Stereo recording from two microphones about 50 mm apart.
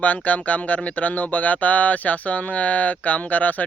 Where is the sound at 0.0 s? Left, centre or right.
Left.